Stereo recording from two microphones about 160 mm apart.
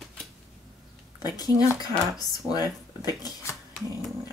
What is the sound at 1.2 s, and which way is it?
Speech, 25° left (ahead or behind).